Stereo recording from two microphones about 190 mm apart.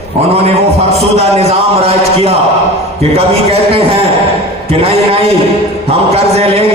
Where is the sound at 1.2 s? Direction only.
35° right (ahead or behind).